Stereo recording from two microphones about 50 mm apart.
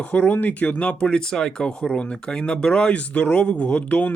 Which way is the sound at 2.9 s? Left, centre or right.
Left.